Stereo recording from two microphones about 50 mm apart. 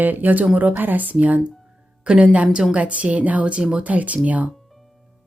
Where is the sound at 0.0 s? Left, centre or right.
Right.